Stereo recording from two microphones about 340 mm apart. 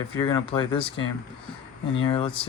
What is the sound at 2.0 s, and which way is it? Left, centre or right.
Speech, centre.